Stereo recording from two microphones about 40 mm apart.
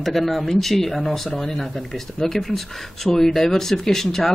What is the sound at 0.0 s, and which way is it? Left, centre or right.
Speech, centre.